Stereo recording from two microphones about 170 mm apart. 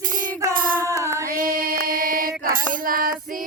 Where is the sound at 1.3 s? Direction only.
60° right (ahead or behind).